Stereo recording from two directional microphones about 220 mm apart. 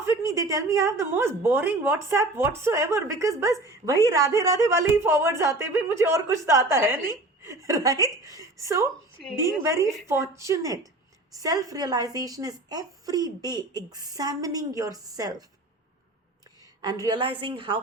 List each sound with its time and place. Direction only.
0.0 s a woman's voice: 15° right (ahead or behind)
9.2 s a woman's voice: centre (ahead or behind)
10.1 s a woman's voice: 15° right (ahead or behind)
16.8 s a woman's voice: 20° right (ahead or behind)